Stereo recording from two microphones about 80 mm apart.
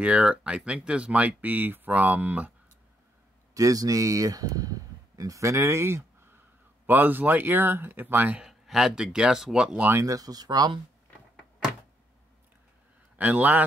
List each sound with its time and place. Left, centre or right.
0.0 s speech: centre
3.5 s speech: right
8.4 s speech: centre
10.0 s speech: right
13.2 s speech: right